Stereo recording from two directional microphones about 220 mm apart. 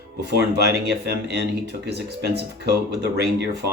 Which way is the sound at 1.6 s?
50° right (ahead or behind).